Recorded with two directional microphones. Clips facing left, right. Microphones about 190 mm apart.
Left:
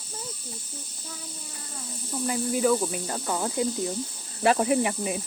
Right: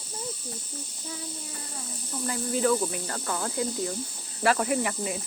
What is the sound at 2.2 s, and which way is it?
Speech, 10° left (ahead or behind).